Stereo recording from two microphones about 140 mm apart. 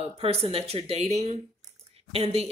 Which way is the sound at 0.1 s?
45° right (ahead or behind).